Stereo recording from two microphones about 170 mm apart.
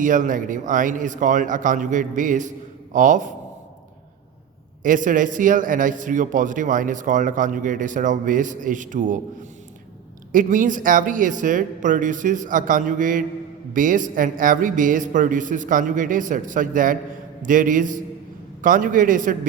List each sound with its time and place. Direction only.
0.0 s a man's voice: 50° right (ahead or behind)
4.8 s a man's voice: 50° right (ahead or behind)
10.3 s a man's voice: 50° right (ahead or behind)